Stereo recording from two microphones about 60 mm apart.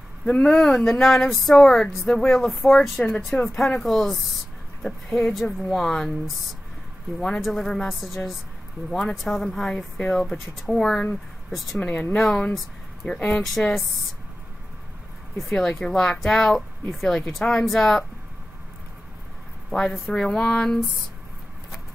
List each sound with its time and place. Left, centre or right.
0.2 s speech: centre
11.8 s speech: left
12.2 s speech: centre
15.7 s speech: centre
19.7 s speech: centre